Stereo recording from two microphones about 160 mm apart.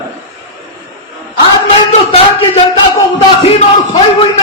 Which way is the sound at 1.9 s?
40° left (ahead or behind).